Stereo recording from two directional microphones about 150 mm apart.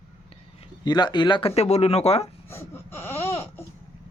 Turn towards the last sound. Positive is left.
turn(degrees=15)  # may be behind; listen again after turning